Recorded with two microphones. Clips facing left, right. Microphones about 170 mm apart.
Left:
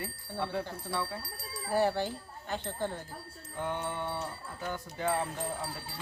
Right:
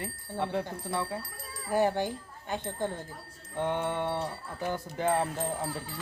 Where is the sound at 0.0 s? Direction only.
20° right (ahead or behind).